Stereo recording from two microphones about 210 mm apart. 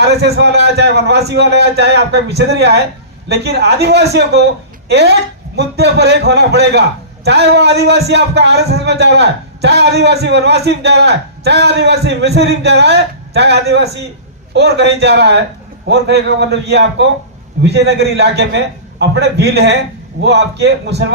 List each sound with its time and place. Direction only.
0.0 s a man's voice: 50° right (ahead or behind)